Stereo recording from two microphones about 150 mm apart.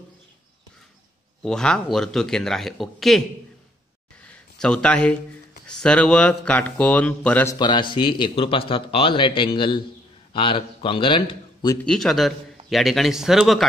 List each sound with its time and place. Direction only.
1.4 s a man's voice: 5° left (ahead or behind)
4.6 s a man's voice: 5° left (ahead or behind)
7.5 s a man's voice: 30° left (ahead or behind)
11.8 s a man's voice: 5° left (ahead or behind)